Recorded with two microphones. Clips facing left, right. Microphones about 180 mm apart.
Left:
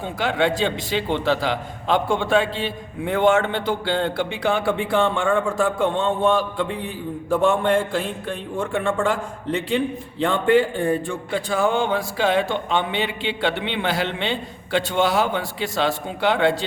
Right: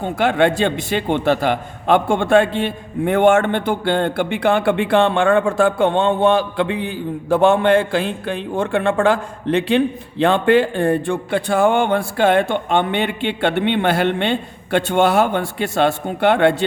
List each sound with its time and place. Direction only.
0.0 s a man's voice: 55° right (ahead or behind)